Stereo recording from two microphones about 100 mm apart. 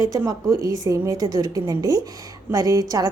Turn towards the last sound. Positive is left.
turn(degrees=-35)  # may be behind; listen again after turning